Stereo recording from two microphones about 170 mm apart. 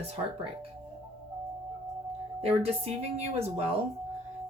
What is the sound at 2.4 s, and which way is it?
Speech, 35° right (ahead or behind).